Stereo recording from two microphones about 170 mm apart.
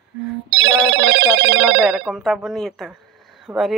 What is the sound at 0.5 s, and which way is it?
Telephone bell ringing, 90° right.